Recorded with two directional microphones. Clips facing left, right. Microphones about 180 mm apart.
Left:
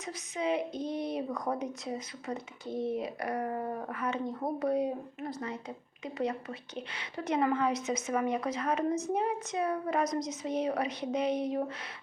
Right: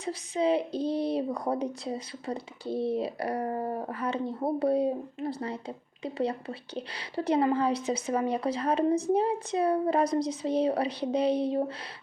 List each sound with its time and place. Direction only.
0.0 s speech: 30° right (ahead or behind)